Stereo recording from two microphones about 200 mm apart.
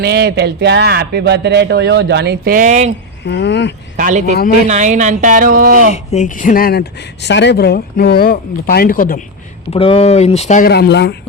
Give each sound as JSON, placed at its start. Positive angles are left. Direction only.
{"t": 0.0, "sound": "speech", "side_deg": -50}
{"t": 3.2, "sound": "speech", "side_deg": 60}
{"t": 3.9, "sound": "speech", "side_deg": -40}
{"t": 5.9, "sound": "speech", "side_deg": 35}
{"t": 9.7, "sound": "speech", "side_deg": 30}
{"t": 10.7, "sound": "speech", "side_deg": 55}